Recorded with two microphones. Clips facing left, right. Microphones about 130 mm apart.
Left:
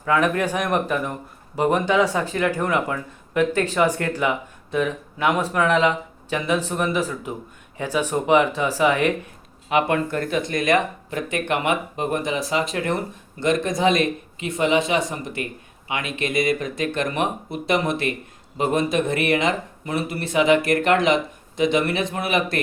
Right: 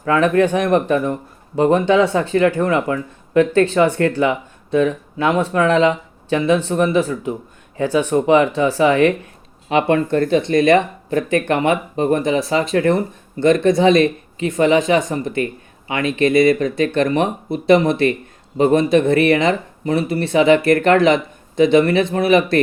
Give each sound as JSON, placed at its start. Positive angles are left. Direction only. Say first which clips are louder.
{"t": 0.2, "sound": "speech", "louder": "right 7 dB", "side_deg": -30}